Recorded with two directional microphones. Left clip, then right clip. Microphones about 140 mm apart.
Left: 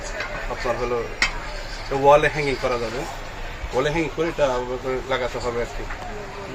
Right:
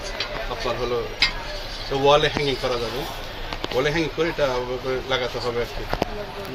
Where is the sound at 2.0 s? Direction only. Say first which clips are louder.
Left 2 dB; 20° left (ahead or behind).